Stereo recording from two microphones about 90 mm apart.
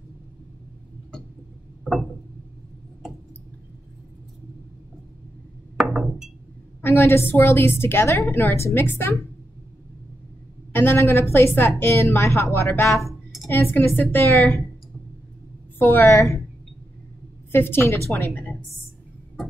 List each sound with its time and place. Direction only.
5.8 s a sound: 5° right (ahead or behind)
6.8 s a woman's voice: 25° left (ahead or behind)
10.7 s a woman's voice: 25° left (ahead or behind)
15.8 s a woman's voice: 25° left (ahead or behind)
17.5 s a woman's voice: 25° left (ahead or behind)